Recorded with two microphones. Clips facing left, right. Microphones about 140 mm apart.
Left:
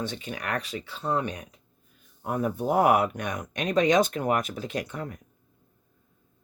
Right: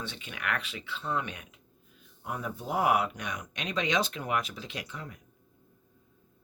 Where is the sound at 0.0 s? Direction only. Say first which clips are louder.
Left 5 dB; 40° left (ahead or behind).